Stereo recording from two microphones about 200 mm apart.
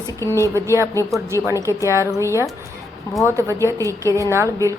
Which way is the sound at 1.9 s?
15° right (ahead or behind).